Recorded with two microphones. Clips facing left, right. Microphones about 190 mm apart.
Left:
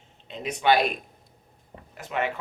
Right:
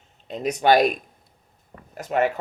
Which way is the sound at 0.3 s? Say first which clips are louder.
Right 4 dB; 40° right (ahead or behind).